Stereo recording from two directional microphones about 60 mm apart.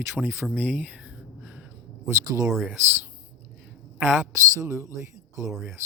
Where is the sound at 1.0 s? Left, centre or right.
Centre.